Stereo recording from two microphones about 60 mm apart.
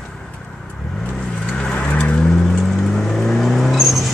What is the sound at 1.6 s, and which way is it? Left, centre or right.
Vehicle, centre.